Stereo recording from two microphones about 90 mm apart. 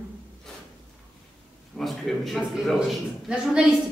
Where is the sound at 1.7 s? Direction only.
Centre (ahead or behind).